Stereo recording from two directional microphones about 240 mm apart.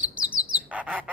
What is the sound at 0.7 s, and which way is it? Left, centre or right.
Bird, centre.